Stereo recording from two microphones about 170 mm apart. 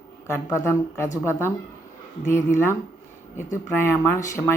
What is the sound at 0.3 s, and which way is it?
Speech, 15° left (ahead or behind).